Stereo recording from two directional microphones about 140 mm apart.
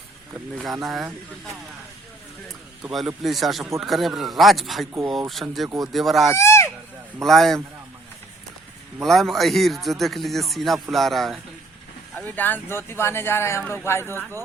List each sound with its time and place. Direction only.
0.9 s speech: centre (ahead or behind)
2.5 s speech: centre (ahead or behind)
5.6 s speech: 25° right (ahead or behind)
5.9 s speech: centre (ahead or behind)
6.3 s a sound: 20° left (ahead or behind)
7.2 s speech: centre (ahead or behind)
9.0 s speech: centre (ahead or behind)
12.1 s speech: 15° left (ahead or behind)